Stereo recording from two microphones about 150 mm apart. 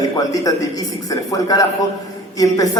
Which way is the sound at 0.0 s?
25° left (ahead or behind).